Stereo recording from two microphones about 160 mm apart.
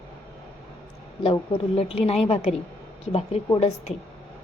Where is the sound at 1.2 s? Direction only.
35° left (ahead or behind).